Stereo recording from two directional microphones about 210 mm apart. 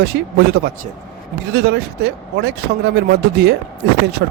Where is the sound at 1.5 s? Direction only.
50° right (ahead or behind).